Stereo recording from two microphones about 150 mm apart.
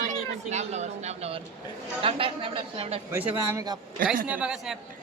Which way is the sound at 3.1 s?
10° right (ahead or behind).